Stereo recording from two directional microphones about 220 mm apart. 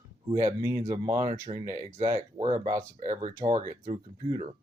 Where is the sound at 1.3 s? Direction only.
15° right (ahead or behind).